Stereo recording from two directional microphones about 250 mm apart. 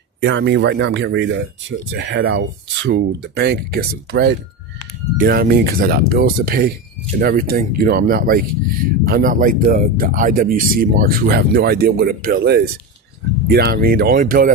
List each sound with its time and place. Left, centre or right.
0.2 s speech: right